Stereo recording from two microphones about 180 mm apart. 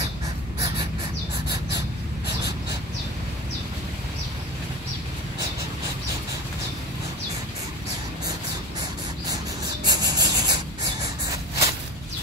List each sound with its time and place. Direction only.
9.8 s rub: 20° right (ahead or behind)